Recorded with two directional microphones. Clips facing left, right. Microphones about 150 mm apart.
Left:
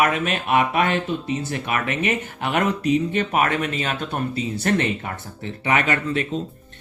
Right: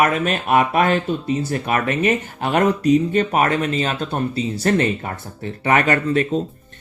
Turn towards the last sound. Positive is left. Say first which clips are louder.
# right 5 dB
turn(degrees=-40)  # may be behind; listen again after turning